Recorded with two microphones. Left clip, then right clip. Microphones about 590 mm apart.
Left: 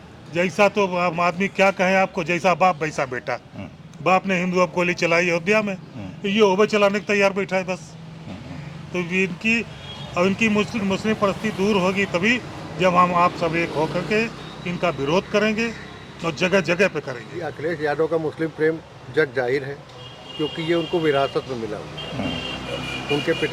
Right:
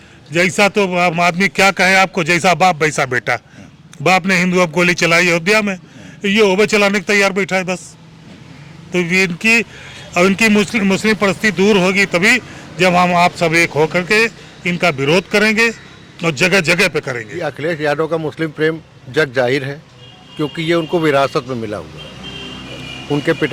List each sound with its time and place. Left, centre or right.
0.3 s a man's voice: right
8.9 s a man's voice: right